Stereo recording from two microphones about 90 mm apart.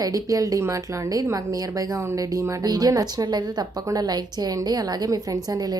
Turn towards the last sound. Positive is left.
turn(degrees=-45)  # may be behind; listen again after turning